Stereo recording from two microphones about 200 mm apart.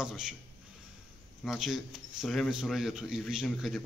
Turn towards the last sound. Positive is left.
turn(degrees=0)  # may be behind; listen again after turning